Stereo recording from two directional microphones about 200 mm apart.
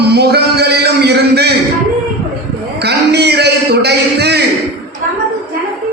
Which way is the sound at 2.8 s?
55° right (ahead or behind).